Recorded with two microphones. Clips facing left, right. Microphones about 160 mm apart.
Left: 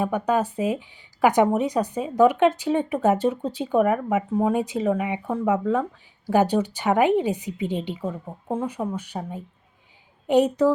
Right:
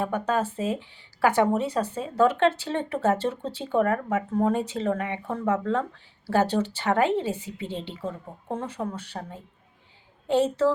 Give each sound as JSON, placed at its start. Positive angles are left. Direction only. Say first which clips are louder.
{"t": 0.0, "sound": "speech", "louder": "left 3 dB", "side_deg": 15}